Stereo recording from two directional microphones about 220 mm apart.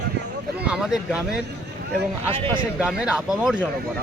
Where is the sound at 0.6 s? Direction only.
5° right (ahead or behind).